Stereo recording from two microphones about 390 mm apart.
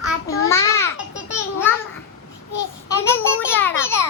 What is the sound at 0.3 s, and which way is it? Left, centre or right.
Babbling, centre.